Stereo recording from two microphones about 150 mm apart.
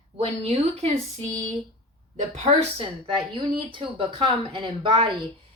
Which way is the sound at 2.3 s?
45° right (ahead or behind).